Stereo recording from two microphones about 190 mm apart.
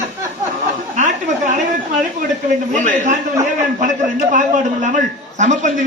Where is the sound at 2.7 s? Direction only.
40° right (ahead or behind).